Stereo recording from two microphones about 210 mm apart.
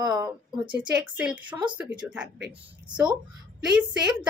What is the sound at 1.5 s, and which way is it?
Speech, 20° right (ahead or behind).